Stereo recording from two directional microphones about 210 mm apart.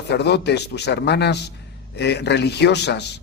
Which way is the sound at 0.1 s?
50° left (ahead or behind).